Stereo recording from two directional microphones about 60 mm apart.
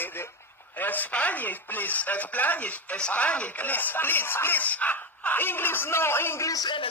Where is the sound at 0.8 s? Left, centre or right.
Left.